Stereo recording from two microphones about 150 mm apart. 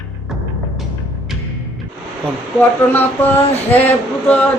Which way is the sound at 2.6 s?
15° left (ahead or behind).